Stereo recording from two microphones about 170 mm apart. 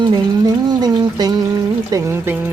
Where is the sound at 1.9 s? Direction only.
15° right (ahead or behind).